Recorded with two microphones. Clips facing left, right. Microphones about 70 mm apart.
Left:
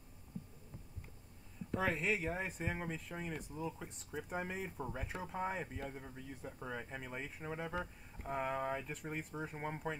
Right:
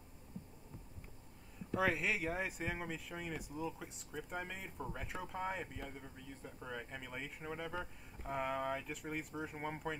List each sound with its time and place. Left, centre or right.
1.8 s speech: centre
4.1 s speech: centre